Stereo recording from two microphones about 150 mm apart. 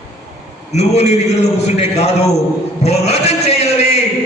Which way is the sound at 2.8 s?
45° left (ahead or behind).